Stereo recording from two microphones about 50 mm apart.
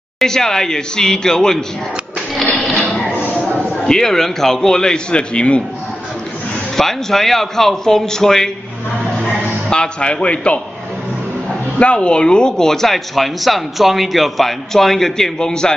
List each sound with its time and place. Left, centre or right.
0.2 s speech: centre
3.4 s a sound: left
3.8 s speech: centre
6.8 s speech: centre
9.7 s a man's voice: centre
11.8 s speech: left